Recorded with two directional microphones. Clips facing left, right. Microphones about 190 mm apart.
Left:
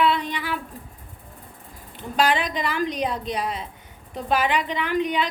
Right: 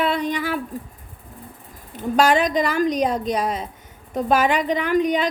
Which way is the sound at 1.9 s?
45° right (ahead or behind).